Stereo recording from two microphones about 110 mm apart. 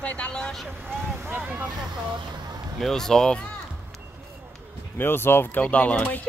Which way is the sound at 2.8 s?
5° left (ahead or behind).